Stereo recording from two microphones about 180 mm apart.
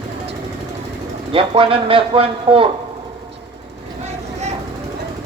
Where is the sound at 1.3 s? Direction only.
30° right (ahead or behind).